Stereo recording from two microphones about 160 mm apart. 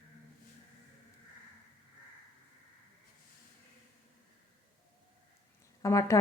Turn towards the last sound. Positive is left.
turn(degrees=20)  # may be behind; listen again after turning